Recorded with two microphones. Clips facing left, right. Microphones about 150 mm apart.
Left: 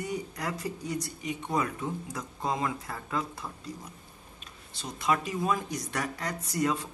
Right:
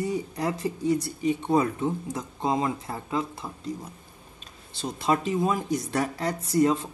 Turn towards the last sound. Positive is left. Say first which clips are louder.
# right 7 dB
turn(degrees=-25)  # may be behind; listen again after turning